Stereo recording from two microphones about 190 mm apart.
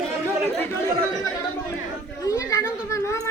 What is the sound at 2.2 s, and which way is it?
Children playing, 20° left (ahead or behind).